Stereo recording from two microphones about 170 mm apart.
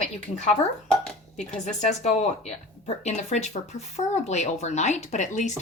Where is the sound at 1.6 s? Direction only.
45° left (ahead or behind).